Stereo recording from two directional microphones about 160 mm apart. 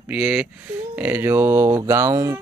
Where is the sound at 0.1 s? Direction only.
10° right (ahead or behind).